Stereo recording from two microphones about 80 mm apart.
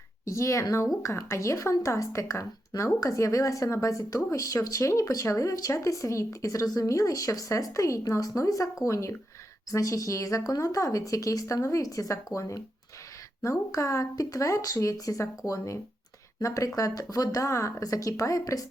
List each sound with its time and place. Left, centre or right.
0.3 s a woman's voice: left